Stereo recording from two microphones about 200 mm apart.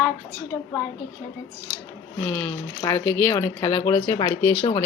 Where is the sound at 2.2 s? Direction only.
10° left (ahead or behind).